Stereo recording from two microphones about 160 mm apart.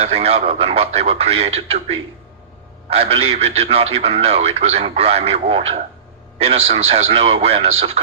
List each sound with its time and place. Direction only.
0.0 s speech: 40° right (ahead or behind)